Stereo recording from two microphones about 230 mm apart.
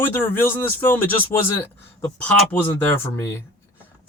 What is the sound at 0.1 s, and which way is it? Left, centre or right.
Speech, centre.